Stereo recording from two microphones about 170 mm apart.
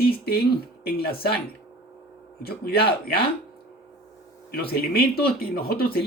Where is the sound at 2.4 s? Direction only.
65° left (ahead or behind).